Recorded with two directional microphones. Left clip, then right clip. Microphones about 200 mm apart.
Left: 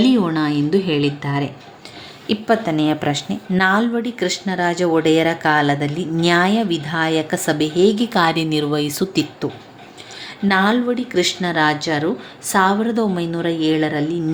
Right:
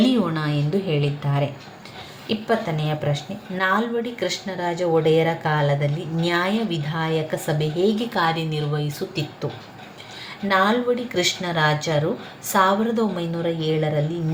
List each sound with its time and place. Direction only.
0.1 s a sound: 45° left (ahead or behind)
2.2 s speech: 55° left (ahead or behind)
10.5 s speech: 45° left (ahead or behind)